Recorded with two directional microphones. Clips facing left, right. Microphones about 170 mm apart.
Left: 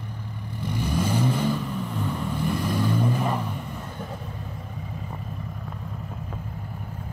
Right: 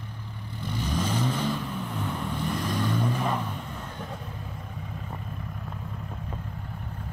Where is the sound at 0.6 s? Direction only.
10° left (ahead or behind).